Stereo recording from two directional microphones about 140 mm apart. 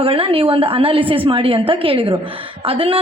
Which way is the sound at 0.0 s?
40° right (ahead or behind).